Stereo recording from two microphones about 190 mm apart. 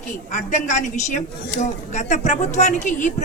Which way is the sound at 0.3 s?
40° left (ahead or behind).